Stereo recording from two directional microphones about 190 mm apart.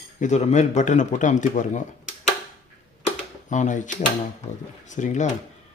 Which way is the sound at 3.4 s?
40° left (ahead or behind).